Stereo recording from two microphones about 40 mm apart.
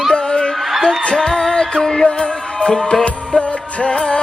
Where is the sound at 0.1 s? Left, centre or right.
Left.